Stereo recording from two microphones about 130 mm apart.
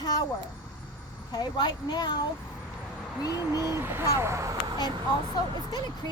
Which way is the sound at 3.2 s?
30° left (ahead or behind).